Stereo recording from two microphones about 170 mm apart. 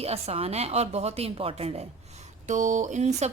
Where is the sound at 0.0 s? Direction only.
35° right (ahead or behind).